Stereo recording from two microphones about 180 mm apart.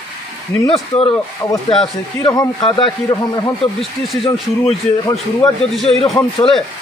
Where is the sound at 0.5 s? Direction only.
10° left (ahead or behind).